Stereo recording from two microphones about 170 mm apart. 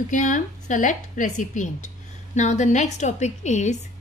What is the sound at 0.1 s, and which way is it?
A woman's voice, 50° left (ahead or behind).